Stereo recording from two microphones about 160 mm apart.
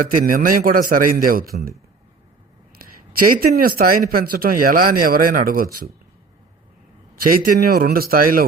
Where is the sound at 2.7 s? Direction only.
65° right (ahead or behind).